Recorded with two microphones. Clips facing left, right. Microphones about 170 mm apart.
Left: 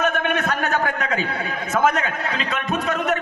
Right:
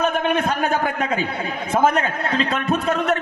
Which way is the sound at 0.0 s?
30° right (ahead or behind).